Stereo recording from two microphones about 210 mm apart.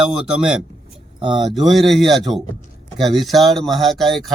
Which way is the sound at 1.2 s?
20° right (ahead or behind).